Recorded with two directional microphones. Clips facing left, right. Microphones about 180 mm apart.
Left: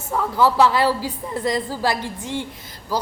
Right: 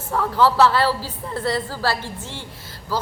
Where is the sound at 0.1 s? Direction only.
15° left (ahead or behind).